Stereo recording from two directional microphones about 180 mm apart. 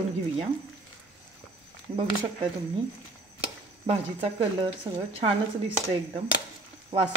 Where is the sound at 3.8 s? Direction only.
30° right (ahead or behind).